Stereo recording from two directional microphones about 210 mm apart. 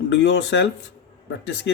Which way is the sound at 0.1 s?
55° left (ahead or behind).